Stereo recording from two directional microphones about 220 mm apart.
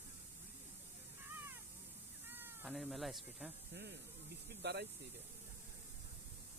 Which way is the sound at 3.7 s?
50° right (ahead or behind).